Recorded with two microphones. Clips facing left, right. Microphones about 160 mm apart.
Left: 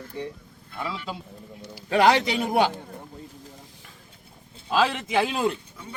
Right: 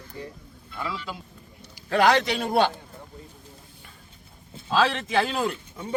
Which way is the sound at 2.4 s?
15° left (ahead or behind).